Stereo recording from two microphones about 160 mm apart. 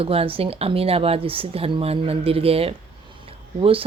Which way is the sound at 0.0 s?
35° right (ahead or behind).